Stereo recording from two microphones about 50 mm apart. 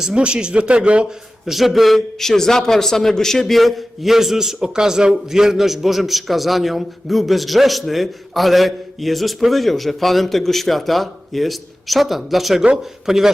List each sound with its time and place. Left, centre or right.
0.0 s speech: centre
1.5 s a man's voice: centre